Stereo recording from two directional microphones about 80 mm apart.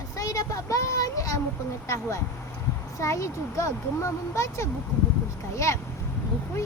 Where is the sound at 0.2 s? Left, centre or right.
Left.